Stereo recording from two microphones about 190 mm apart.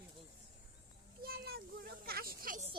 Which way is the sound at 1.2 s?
55° right (ahead or behind).